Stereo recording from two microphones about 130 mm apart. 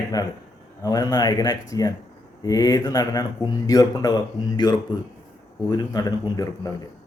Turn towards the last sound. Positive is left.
turn(degrees=25)  # may be behind; listen again after turning